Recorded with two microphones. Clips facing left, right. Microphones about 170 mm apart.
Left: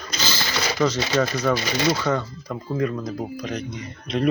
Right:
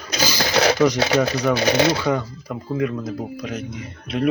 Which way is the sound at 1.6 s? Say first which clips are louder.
Right 6 dB; 75° right (ahead or behind).